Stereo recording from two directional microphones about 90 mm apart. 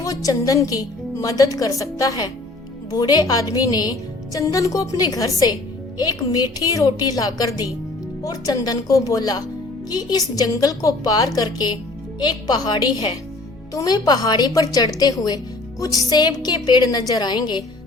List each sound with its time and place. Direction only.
0.0 s a woman's voice: 40° left (ahead or behind)